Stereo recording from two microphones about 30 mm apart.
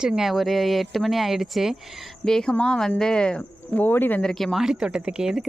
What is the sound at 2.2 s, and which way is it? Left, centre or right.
Speech, left.